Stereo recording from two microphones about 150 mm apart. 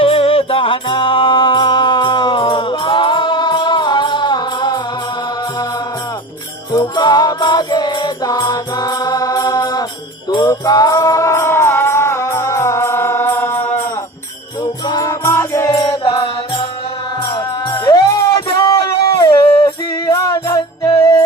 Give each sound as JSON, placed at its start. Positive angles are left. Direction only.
{"t": 0.0, "sound": "music", "side_deg": 40}
{"t": 6.7, "sound": "music", "side_deg": 30}
{"t": 10.2, "sound": "mantra", "side_deg": 30}
{"t": 14.8, "sound": "music", "side_deg": 25}
{"t": 16.0, "sound": "mantra", "side_deg": 30}
{"t": 17.3, "sound": "music", "side_deg": 30}